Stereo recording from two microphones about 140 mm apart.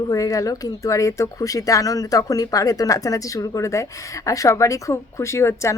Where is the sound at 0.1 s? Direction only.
25° left (ahead or behind).